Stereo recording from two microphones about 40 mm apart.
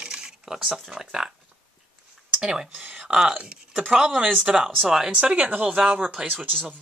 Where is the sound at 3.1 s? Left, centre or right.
Right.